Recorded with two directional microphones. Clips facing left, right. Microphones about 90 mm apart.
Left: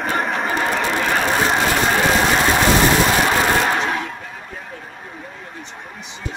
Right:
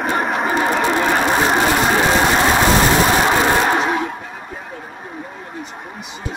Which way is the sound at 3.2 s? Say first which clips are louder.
Right 2 dB; 20° right (ahead or behind).